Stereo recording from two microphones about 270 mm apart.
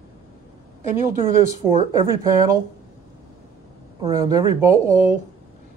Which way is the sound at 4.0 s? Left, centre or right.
Centre.